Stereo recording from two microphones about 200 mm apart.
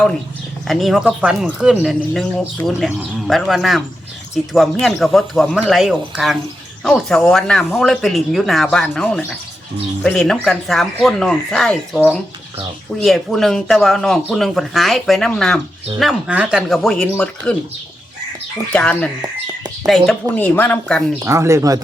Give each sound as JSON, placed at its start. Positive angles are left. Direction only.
{"t": 0.7, "sound": "speech", "side_deg": 0}
{"t": 13.1, "sound": "speech", "side_deg": 0}
{"t": 18.7, "sound": "speech", "side_deg": 5}
{"t": 21.2, "sound": "speech", "side_deg": -15}